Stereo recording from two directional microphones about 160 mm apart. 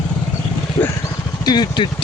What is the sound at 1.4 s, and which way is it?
Speech, 25° left (ahead or behind).